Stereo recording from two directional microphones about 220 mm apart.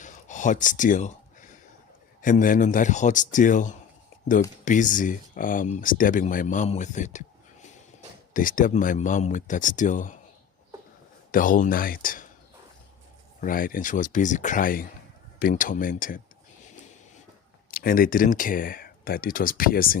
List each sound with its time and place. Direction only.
0.0 s a sound: 35° left (ahead or behind)
2.2 s speech: 35° left (ahead or behind)
11.3 s speech: 40° left (ahead or behind)
13.4 s speech: 40° left (ahead or behind)
17.7 s speech: 40° left (ahead or behind)